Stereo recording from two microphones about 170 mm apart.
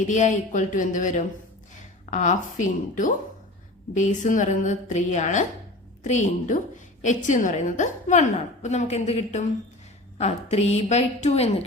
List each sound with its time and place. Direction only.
0.1 s a woman's voice: 45° left (ahead or behind)